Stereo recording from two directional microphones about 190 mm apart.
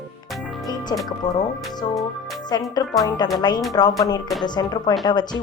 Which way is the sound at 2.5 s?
20° left (ahead or behind).